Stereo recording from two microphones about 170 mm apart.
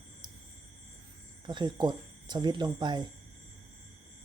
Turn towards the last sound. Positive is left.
turn(degrees=-25)  # may be behind; listen again after turning